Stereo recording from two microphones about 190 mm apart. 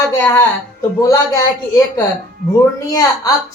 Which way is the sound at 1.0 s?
15° left (ahead or behind).